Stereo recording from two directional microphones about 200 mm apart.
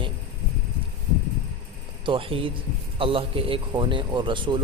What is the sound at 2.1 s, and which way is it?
A man's voice, 25° right (ahead or behind).